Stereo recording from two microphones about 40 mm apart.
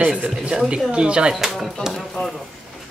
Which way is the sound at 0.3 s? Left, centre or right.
Centre.